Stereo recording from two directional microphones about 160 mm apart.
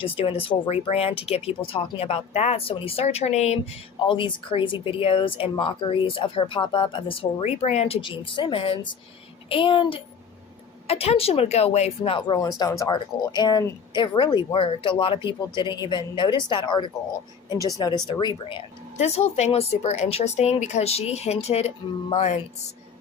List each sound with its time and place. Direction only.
0.0 s speech: 35° left (ahead or behind)
4.0 s speech: 30° left (ahead or behind)
12.4 s speech: 20° left (ahead or behind)
18.9 s speech: 40° left (ahead or behind)